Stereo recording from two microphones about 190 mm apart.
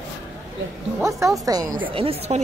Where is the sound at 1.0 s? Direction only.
15° right (ahead or behind).